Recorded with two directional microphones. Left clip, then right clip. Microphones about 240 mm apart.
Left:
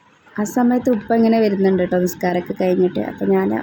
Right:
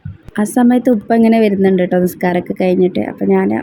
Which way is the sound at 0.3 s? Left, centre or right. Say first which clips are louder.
Right 5 dB; right.